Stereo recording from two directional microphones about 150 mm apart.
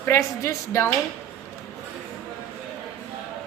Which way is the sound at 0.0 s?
20° left (ahead or behind).